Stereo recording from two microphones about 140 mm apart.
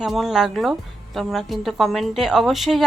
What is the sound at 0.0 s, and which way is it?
Speech, centre (ahead or behind).